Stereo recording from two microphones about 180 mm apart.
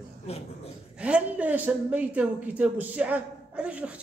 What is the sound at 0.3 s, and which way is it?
Speech, 35° left (ahead or behind).